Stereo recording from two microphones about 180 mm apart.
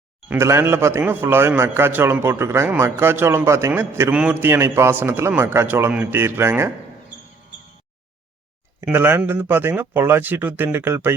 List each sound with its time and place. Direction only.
0.3 s a man's voice: 15° right (ahead or behind)
8.8 s a man's voice: 10° right (ahead or behind)